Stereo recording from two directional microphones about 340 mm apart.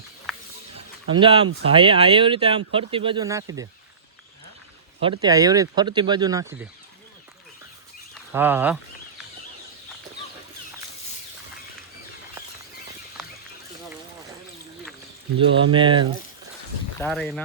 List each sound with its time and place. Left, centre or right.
0.3 s a sound: centre
1.1 s speech: centre
4.9 s speech: centre
8.1 s speech: centre
15.4 s speech: centre
17.0 s speech: centre